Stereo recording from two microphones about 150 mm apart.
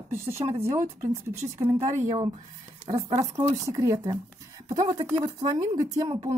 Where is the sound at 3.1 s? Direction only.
20° right (ahead or behind).